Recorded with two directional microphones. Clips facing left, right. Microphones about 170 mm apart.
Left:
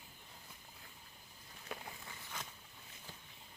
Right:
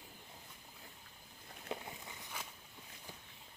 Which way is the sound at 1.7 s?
20° right (ahead or behind).